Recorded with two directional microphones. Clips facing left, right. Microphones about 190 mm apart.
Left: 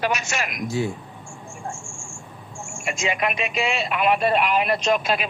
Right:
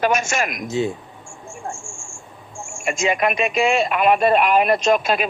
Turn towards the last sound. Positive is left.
turn(degrees=-50)  # may be behind; listen again after turning